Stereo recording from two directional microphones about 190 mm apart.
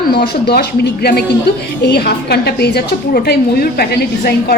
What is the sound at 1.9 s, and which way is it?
A woman's voice, 60° left (ahead or behind).